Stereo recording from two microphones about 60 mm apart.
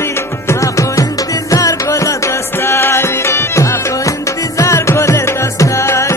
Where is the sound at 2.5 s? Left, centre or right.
Left.